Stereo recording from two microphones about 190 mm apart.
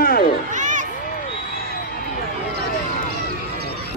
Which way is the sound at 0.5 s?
40° right (ahead or behind).